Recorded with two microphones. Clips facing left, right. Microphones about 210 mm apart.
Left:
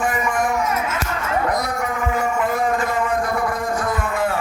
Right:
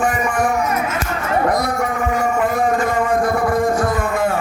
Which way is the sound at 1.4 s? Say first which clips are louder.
Right 4 dB; 30° right (ahead or behind).